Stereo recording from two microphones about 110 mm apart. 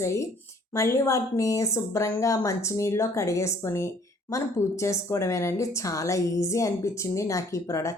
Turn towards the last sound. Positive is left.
turn(degrees=25)  # may be behind; listen again after turning